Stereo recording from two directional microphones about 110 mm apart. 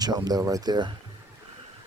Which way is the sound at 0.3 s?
35° right (ahead or behind).